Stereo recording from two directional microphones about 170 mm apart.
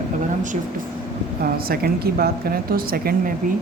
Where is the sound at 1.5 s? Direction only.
60° right (ahead or behind).